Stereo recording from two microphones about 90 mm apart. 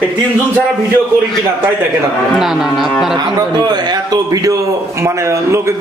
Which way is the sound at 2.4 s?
Centre (ahead or behind).